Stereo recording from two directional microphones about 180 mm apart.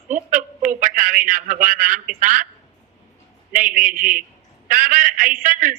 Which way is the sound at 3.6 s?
45° right (ahead or behind).